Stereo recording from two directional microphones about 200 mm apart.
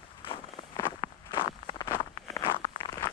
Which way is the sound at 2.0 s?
25° left (ahead or behind).